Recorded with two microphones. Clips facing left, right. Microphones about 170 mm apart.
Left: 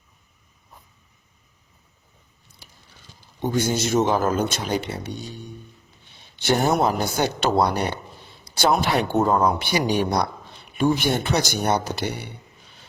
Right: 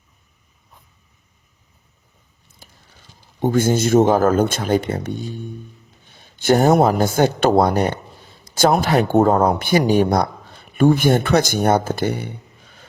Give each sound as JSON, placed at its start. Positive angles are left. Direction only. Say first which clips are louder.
{"t": 2.5, "sound": "biting", "louder": "right 3 dB", "side_deg": -45}
{"t": 3.4, "sound": "speech", "louder": "right 6 dB", "side_deg": -50}